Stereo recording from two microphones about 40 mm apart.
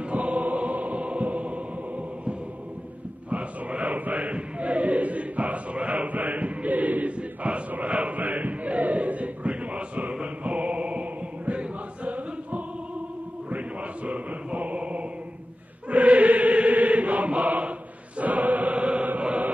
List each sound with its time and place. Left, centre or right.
0.1 s music: right
3.3 s chant: right
7.7 s a sound: right
10.2 s choir: right
14.0 s chant: right